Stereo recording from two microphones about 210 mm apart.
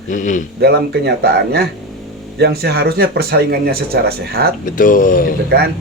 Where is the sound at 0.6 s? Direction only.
50° right (ahead or behind).